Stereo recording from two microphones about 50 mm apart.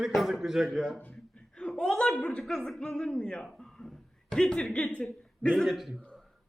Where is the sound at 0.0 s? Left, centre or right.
Centre.